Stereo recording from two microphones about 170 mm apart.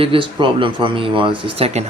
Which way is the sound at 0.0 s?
30° right (ahead or behind).